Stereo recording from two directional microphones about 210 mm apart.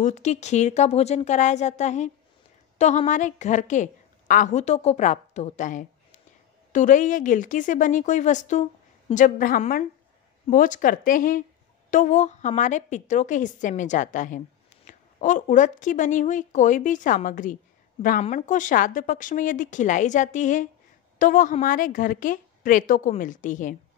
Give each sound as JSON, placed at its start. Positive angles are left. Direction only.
{"t": 0.0, "sound": "a woman's voice", "side_deg": 35}